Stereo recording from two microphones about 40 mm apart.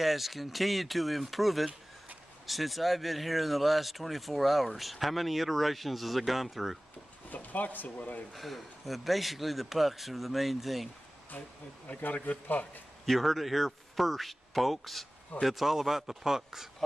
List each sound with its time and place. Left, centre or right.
0.0 s speech: centre
7.2 s speech: left
8.4 s speech: centre
12.0 s speech: left
13.0 s speech: centre